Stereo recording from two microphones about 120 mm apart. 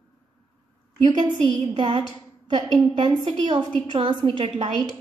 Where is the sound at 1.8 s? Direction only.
45° right (ahead or behind).